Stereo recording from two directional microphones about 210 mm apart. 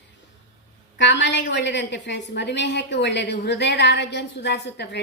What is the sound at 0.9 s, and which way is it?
A woman's voice, 55° left (ahead or behind).